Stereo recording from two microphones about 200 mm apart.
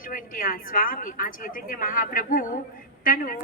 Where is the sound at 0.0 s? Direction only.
40° left (ahead or behind).